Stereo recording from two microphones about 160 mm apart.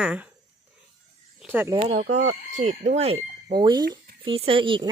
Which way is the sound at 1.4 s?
10° right (ahead or behind).